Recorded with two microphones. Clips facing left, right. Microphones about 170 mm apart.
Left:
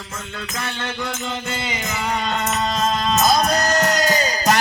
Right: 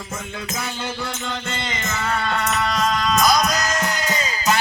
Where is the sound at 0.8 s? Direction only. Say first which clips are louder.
Left 1 dB; 5° right (ahead or behind).